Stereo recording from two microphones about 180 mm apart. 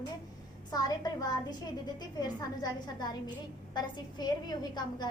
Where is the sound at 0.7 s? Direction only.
20° left (ahead or behind).